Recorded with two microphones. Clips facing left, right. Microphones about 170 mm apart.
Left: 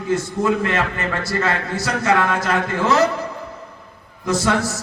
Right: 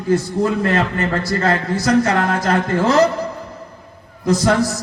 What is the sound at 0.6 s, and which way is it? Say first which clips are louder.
A man's voice: right 4 dB; 40° right (ahead or behind).